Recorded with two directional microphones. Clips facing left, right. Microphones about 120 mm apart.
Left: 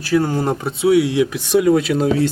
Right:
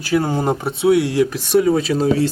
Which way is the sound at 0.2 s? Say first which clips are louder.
Even; 20° right (ahead or behind).